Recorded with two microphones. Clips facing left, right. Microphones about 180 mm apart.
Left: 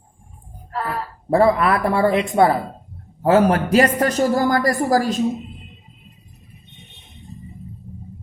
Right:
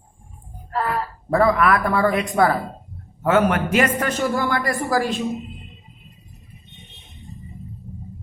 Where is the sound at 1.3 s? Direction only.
30° left (ahead or behind).